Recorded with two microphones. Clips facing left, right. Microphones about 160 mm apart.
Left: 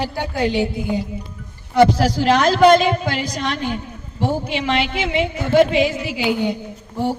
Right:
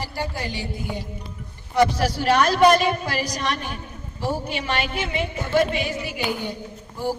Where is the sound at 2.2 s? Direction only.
90° left.